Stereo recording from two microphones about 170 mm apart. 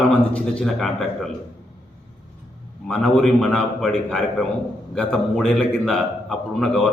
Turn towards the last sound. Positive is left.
turn(degrees=5)  # may be behind; listen again after turning